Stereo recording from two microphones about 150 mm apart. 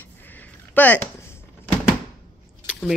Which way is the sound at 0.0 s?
10° left (ahead or behind).